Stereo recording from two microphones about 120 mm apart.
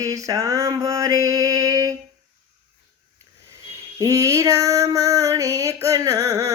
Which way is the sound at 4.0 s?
25° right (ahead or behind).